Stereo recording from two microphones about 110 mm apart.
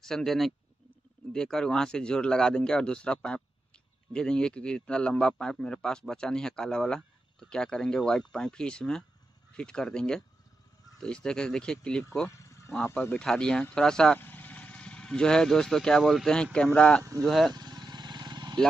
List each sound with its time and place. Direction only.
0.0 s a man's voice: 5° left (ahead or behind)
12.4 s a sound: 25° left (ahead or behind)
12.8 s a man's voice: 20° left (ahead or behind)
13.2 s a man's voice: 5° left (ahead or behind)
17.6 s vehicle: 40° right (ahead or behind)